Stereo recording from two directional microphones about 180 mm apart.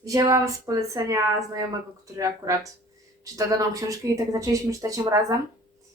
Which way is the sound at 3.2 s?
20° right (ahead or behind).